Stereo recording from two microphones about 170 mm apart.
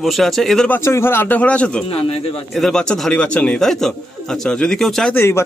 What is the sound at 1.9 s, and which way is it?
Speech, 35° left (ahead or behind).